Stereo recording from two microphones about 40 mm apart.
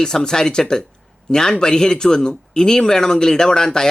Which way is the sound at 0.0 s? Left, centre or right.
Centre.